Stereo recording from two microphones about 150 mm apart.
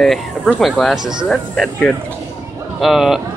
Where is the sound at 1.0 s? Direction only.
30° right (ahead or behind).